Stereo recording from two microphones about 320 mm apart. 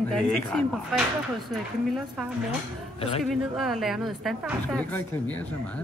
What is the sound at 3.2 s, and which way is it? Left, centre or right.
A woman's voice, centre.